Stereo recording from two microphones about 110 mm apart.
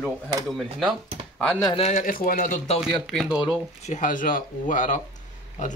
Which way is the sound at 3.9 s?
90° left.